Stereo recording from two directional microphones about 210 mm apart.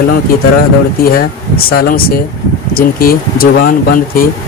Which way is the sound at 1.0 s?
45° left (ahead or behind).